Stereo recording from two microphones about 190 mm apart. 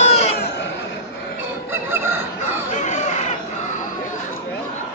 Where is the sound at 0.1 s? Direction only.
35° left (ahead or behind).